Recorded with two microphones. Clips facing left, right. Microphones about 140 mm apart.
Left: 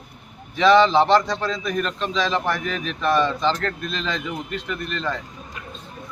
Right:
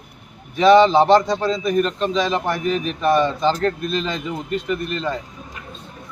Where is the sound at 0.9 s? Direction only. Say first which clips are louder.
Right 3 dB; 10° right (ahead or behind).